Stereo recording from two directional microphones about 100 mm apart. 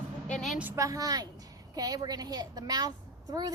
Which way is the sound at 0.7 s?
35° right (ahead or behind).